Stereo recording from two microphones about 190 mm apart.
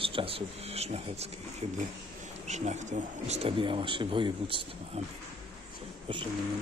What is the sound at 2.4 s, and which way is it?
Speech, 40° right (ahead or behind).